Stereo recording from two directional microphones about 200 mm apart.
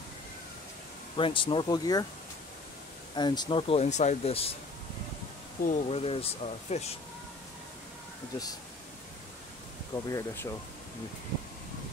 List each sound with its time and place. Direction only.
1.1 s speech: 25° left (ahead or behind)
3.2 s speech: 20° left (ahead or behind)
5.7 s speech: 30° left (ahead or behind)
10.0 s speech: 15° left (ahead or behind)